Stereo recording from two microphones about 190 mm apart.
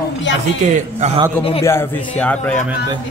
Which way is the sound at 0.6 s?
35° right (ahead or behind).